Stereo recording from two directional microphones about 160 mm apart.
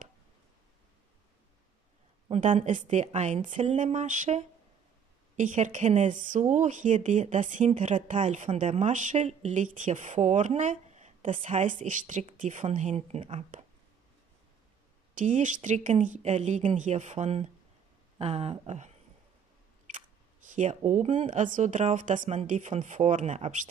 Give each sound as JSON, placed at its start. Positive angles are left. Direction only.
{"t": 2.2, "sound": "speech", "side_deg": -45}
{"t": 15.1, "sound": "speech", "side_deg": -50}
{"t": 18.2, "sound": "a sound", "side_deg": -40}
{"t": 19.9, "sound": "speech", "side_deg": -50}